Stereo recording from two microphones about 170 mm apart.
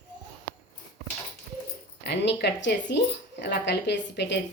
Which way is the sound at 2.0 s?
90° left.